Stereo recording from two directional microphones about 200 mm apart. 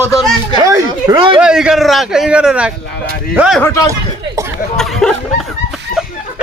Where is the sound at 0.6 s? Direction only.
15° right (ahead or behind).